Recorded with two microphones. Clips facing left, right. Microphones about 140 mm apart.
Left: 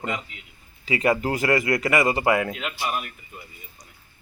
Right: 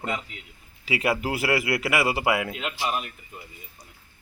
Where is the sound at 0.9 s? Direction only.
5° right (ahead or behind).